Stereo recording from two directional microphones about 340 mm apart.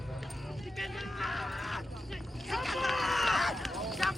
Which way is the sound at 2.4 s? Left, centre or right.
Centre.